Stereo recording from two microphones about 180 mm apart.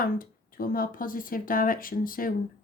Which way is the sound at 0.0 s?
50° left (ahead or behind).